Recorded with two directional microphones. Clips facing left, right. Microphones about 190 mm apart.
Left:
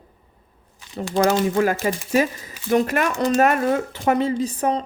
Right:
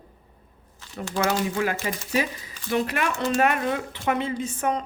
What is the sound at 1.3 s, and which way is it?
A woman's voice, 45° left (ahead or behind).